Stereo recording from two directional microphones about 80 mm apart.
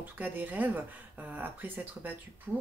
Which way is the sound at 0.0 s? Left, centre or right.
Right.